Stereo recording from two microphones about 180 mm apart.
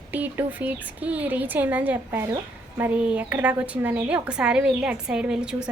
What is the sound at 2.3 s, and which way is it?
Speech, 20° right (ahead or behind).